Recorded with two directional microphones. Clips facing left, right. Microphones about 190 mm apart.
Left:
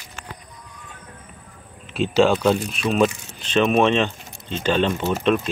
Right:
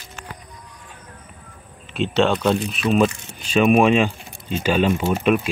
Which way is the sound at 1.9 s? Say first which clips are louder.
Left 2 dB; centre (ahead or behind).